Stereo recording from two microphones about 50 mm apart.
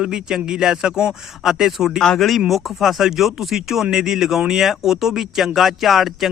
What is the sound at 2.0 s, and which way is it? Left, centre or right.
Speech, centre.